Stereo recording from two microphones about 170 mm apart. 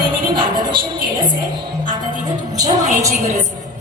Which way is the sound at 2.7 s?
45° right (ahead or behind).